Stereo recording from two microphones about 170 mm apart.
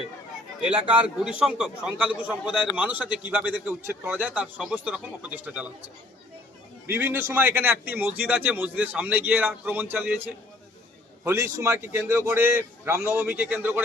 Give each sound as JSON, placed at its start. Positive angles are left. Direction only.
{"t": 0.9, "sound": "a man's voice", "side_deg": -5}
{"t": 6.8, "sound": "a man's voice", "side_deg": -10}
{"t": 11.2, "sound": "a man's voice", "side_deg": -15}